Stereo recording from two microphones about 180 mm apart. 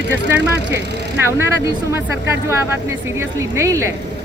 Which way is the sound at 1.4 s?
15° right (ahead or behind).